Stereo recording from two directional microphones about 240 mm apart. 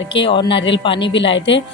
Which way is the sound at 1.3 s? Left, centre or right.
Left.